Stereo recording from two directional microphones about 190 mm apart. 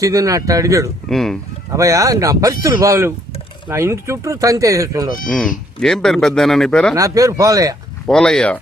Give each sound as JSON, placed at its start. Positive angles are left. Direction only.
{"t": 0.0, "sound": "speech", "side_deg": -15}
{"t": 1.0, "sound": "speech", "side_deg": 0}
{"t": 1.7, "sound": "speech", "side_deg": -15}
{"t": 5.3, "sound": "speech", "side_deg": 5}
{"t": 6.9, "sound": "speech", "side_deg": -15}
{"t": 8.0, "sound": "speech", "side_deg": 5}